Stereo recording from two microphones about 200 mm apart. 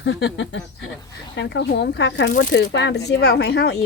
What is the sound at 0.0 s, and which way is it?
Speech, 65° left (ahead or behind).